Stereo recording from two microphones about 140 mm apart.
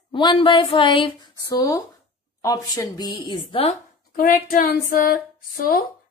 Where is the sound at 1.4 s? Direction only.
25° left (ahead or behind).